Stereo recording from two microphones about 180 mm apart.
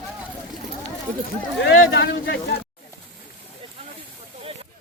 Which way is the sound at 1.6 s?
90° left.